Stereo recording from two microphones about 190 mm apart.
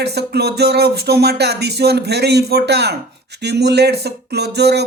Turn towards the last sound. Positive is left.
turn(degrees=-60)  # may be behind; listen again after turning